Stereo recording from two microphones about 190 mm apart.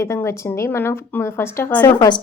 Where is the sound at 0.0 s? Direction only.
15° left (ahead or behind).